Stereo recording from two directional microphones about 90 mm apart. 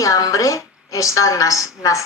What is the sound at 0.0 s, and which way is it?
A woman's voice, 40° left (ahead or behind).